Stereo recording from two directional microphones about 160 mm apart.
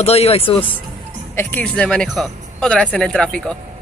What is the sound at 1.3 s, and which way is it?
Speech, 15° left (ahead or behind).